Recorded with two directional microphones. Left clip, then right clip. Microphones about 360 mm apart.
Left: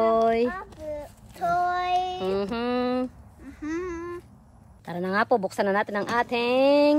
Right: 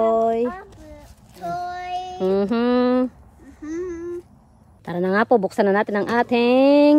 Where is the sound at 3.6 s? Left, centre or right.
Centre.